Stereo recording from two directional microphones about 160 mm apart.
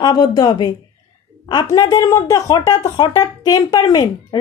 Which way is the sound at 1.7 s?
25° left (ahead or behind).